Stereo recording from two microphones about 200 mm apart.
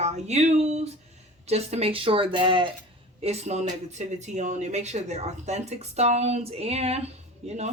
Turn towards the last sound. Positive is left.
turn(degrees=-30)  # may be behind; listen again after turning